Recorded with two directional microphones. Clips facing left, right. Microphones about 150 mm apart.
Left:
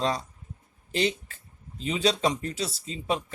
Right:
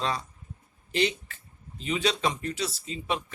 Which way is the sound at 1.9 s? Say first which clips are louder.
Left 2 dB; 30° left (ahead or behind).